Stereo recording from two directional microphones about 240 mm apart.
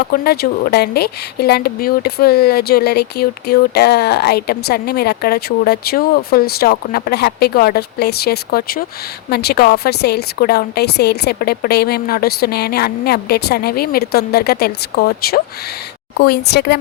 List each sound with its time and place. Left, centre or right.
0.0 s speech: left